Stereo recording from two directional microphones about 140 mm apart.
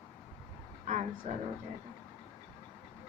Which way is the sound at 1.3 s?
50° right (ahead or behind).